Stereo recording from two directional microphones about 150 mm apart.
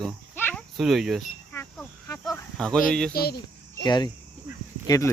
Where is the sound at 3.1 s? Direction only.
90° left.